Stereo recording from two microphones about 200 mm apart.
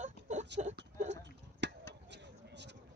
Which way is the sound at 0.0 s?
35° right (ahead or behind).